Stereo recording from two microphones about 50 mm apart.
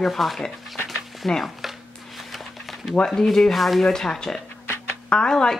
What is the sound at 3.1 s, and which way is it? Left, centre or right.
A woman's voice, centre.